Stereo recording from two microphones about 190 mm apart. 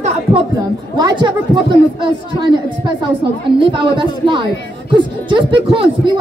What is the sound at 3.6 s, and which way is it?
Speech, 25° right (ahead or behind).